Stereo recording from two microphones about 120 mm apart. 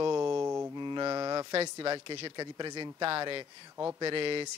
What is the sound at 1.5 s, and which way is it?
A man's voice, 45° right (ahead or behind).